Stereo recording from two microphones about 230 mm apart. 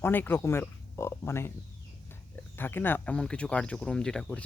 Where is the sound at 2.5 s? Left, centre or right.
Centre.